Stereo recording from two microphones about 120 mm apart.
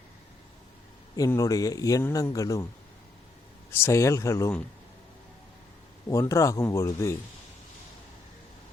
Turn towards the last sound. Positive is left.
turn(degrees=25)  # may be behind; listen again after turning